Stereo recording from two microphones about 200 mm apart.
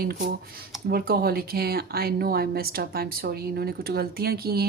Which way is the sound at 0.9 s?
50° right (ahead or behind).